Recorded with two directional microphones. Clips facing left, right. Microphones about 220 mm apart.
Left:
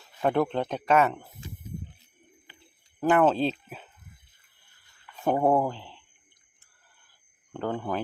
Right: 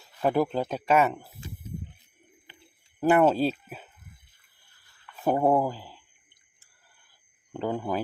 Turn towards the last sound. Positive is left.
turn(degrees=-10)  # may be behind; listen again after turning